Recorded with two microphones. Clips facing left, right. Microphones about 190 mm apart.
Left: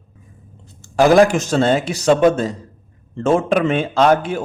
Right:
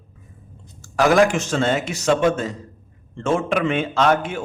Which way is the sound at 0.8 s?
30° left (ahead or behind).